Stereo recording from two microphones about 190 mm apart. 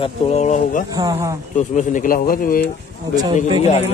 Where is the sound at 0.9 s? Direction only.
20° right (ahead or behind).